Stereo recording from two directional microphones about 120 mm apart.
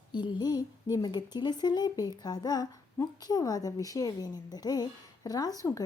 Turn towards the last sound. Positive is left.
turn(degrees=30)  # may be behind; listen again after turning